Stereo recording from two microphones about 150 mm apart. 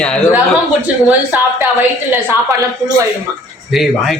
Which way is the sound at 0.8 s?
10° right (ahead or behind).